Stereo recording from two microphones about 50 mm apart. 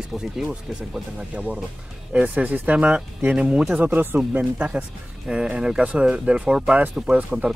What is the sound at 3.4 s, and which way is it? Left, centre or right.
Speech, centre.